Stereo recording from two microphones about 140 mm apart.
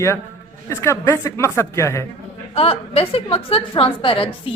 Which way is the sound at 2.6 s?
45° left (ahead or behind).